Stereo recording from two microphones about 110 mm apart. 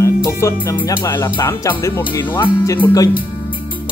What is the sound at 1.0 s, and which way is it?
Speech, 25° left (ahead or behind).